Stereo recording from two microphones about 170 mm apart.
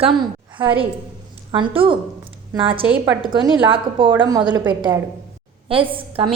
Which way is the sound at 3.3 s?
30° right (ahead or behind).